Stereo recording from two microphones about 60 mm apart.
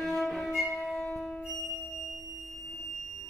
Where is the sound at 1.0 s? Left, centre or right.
Centre.